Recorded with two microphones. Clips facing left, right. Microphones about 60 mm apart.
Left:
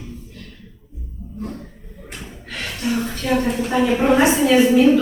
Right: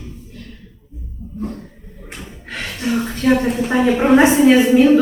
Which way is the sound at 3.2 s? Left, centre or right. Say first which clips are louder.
Right 5 dB; right.